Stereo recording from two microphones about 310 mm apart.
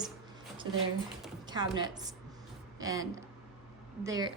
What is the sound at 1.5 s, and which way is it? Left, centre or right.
Speech, centre.